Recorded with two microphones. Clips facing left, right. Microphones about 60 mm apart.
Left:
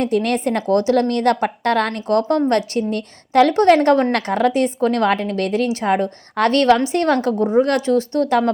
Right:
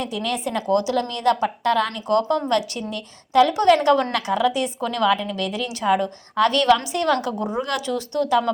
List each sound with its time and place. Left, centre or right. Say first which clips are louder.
0.0 s a woman's voice: left 7 dB; left